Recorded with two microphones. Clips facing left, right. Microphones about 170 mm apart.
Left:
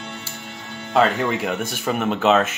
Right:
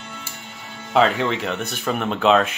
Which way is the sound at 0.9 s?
5° left (ahead or behind).